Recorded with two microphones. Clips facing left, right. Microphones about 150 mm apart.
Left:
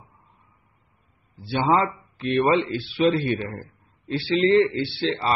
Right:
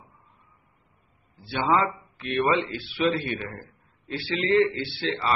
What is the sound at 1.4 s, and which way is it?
A man's voice, 30° left (ahead or behind).